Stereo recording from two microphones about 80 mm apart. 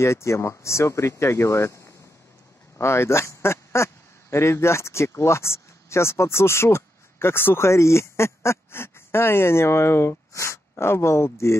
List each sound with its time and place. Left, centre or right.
0.0 s speech: left